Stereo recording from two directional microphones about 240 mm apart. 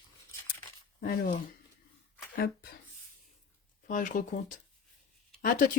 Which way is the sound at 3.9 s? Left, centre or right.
Left.